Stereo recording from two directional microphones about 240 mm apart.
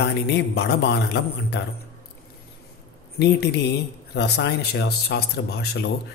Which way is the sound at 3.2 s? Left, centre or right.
Left.